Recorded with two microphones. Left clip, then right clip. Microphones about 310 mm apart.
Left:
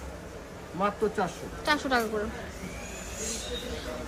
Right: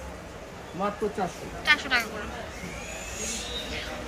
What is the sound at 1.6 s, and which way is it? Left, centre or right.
Speech, centre.